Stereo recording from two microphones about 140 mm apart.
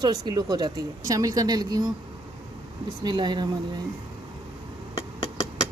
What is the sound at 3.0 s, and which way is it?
Speech, 35° right (ahead or behind).